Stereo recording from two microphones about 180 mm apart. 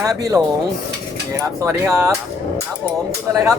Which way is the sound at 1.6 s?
15° right (ahead or behind).